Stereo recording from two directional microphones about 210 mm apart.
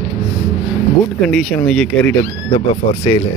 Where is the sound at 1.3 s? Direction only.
5° left (ahead or behind).